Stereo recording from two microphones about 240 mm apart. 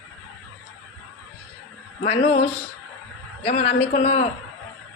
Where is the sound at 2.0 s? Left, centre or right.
Left.